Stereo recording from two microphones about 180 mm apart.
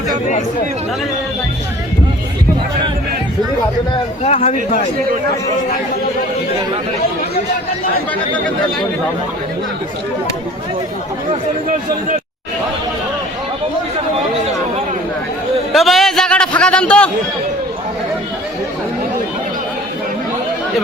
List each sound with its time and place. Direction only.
4.2 s speech: 35° left (ahead or behind)
15.7 s a sound: centre (ahead or behind)
16.6 s a man's voice: 5° left (ahead or behind)